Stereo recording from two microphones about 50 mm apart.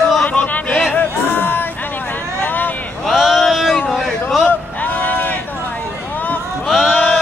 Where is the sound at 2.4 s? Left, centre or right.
Left.